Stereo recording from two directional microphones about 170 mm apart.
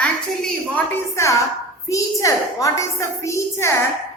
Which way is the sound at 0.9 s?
15° left (ahead or behind).